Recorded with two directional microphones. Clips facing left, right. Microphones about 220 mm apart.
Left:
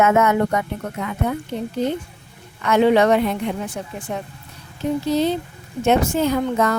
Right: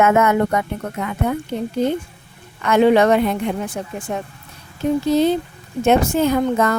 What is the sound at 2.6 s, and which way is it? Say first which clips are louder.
A woman's voice: right 2 dB; 50° right (ahead or behind).